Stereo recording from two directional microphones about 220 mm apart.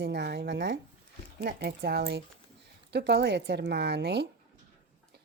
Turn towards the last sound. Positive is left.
turn(degrees=-50)  # may be behind; listen again after turning